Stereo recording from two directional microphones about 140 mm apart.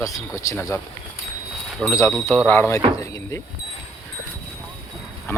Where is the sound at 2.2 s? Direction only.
15° left (ahead or behind).